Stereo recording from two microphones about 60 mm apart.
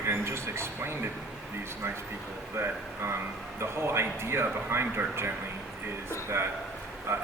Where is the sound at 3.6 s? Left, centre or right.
Right.